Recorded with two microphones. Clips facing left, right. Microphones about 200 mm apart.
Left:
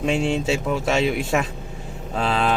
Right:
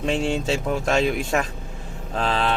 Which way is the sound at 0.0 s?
5° left (ahead or behind).